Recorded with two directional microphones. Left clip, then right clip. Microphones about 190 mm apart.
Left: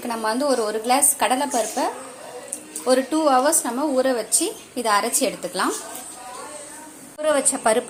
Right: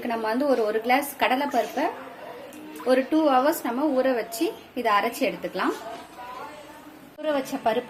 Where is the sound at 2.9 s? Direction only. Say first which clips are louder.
Left 2 dB; 10° left (ahead or behind).